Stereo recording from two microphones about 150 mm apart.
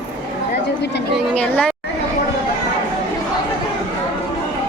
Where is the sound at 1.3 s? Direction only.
10° left (ahead or behind).